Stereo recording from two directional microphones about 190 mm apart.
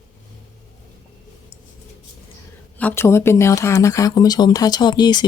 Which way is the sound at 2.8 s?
10° left (ahead or behind).